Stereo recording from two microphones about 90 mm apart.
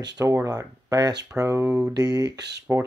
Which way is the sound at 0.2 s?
35° right (ahead or behind).